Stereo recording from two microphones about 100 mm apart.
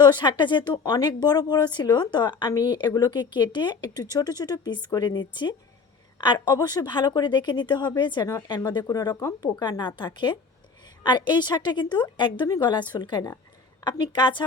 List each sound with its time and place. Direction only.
0.0 s speech: 50° left (ahead or behind)
8.9 s speech: 35° left (ahead or behind); by 14.4 s 55° left (ahead or behind)